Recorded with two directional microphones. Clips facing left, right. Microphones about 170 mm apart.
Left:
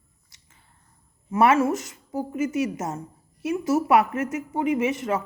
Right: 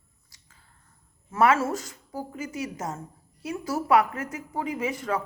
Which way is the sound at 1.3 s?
20° left (ahead or behind).